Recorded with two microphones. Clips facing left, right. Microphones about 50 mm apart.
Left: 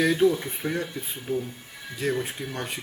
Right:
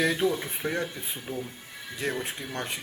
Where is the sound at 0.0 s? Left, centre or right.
Centre.